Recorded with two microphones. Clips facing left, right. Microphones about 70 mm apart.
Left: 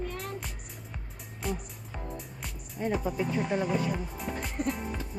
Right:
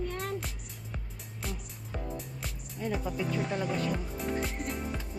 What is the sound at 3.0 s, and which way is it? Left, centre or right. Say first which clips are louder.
Speech: left 3 dB; centre.